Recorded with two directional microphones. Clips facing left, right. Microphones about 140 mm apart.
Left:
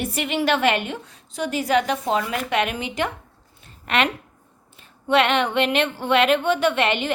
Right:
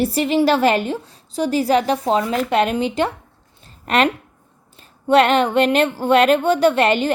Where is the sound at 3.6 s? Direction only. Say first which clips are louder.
Right 5 dB; 35° right (ahead or behind).